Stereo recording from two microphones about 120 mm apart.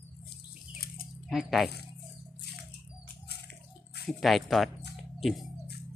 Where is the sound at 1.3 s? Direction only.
Centre (ahead or behind).